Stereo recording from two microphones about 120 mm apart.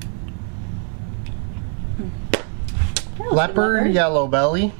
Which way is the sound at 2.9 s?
10° right (ahead or behind).